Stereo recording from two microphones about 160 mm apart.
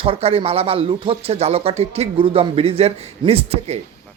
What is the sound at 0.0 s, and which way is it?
Speech, 40° right (ahead or behind).